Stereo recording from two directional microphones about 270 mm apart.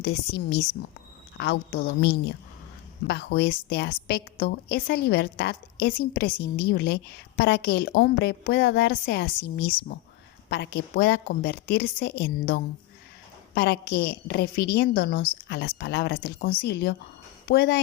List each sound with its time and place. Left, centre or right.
0.0 s a woman's voice: left